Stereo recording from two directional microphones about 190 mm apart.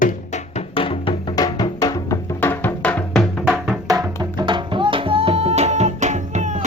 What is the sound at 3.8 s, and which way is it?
Music, 20° right (ahead or behind).